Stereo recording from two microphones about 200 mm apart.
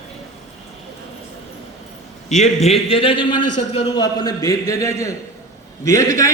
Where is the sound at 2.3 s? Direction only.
35° left (ahead or behind); by 6.3 s 15° left (ahead or behind).